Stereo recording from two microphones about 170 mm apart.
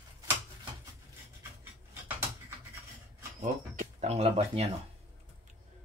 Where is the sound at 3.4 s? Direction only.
45° right (ahead or behind).